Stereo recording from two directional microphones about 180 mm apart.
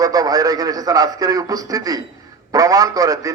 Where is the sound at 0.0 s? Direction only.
20° right (ahead or behind).